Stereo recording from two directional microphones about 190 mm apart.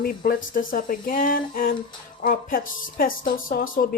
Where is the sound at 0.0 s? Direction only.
50° left (ahead or behind).